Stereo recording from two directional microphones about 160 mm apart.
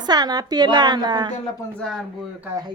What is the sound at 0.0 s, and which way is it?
Speech, 25° right (ahead or behind).